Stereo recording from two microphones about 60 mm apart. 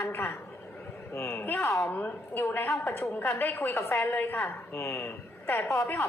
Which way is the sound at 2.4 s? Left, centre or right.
Left.